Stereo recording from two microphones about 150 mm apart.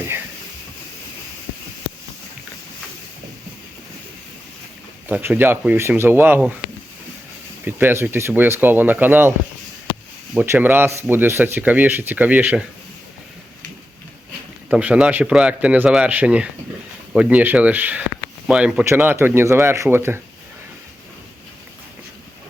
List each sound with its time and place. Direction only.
5.0 s speech: 10° right (ahead or behind)
7.6 s speech: 15° right (ahead or behind)
10.3 s speech: 15° right (ahead or behind)
14.7 s speech: 10° right (ahead or behind)